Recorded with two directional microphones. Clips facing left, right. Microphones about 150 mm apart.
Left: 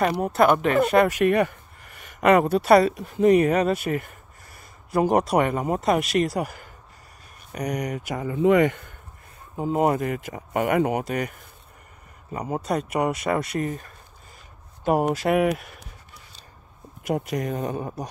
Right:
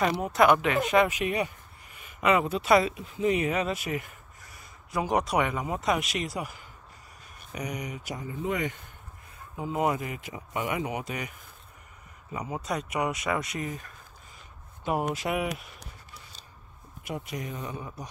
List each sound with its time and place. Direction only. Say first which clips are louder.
0.2 s speech: left 2 dB; 50° left (ahead or behind)
3.7 s speech: left 7 dB; 55° left (ahead or behind)
5.3 s speech: left 6 dB; 45° left (ahead or behind)
7.5 s speech: left 7 dB; 65° left (ahead or behind)
9.6 s speech: left 6 dB; 40° left (ahead or behind)
10.8 s speech: left 9 dB; 60° left (ahead or behind)
12.4 s speech: left 6 dB; 50° left (ahead or behind)
15.2 s speech: left 9 dB; 55° left (ahead or behind)
17.0 s speech: left 9 dB; 70° left (ahead or behind)
17.6 s speech: left 9 dB; 50° left (ahead or behind)